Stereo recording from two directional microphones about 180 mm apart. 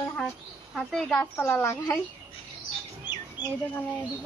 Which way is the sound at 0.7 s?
5° left (ahead or behind).